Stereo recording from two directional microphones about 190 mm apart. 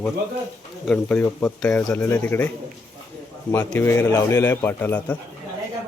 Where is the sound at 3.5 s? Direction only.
10° left (ahead or behind).